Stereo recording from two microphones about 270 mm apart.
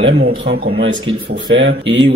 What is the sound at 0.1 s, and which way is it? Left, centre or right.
A man's voice, right.